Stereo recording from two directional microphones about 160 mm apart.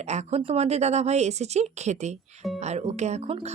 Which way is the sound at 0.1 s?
45° right (ahead or behind).